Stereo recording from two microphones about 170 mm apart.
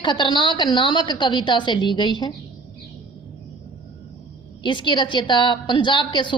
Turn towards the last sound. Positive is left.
turn(degrees=30)  # may be behind; listen again after turning